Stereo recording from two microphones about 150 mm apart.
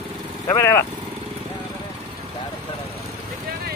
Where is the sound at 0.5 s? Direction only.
20° left (ahead or behind).